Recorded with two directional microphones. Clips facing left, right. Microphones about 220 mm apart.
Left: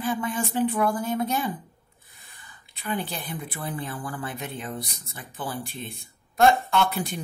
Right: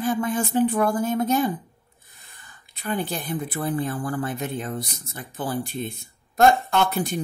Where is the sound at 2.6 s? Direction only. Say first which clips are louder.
Right 3 dB; 45° right (ahead or behind).